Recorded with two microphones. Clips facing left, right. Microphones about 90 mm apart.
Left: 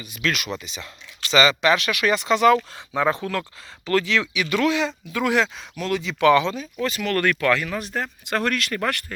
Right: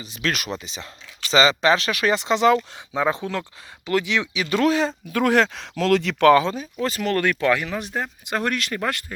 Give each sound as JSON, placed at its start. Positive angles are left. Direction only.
{"t": 0.0, "sound": "a man's voice", "side_deg": -35}
{"t": 4.4, "sound": "a man's voice", "side_deg": -35}
{"t": 5.5, "sound": "speech", "side_deg": -85}
{"t": 6.3, "sound": "a man's voice", "side_deg": -35}
{"t": 7.2, "sound": "speech", "side_deg": -20}